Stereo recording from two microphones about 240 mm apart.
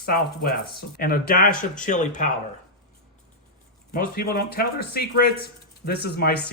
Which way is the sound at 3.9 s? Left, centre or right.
Left.